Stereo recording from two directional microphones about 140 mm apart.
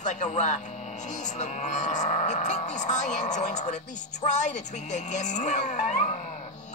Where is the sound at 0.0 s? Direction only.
55° left (ahead or behind).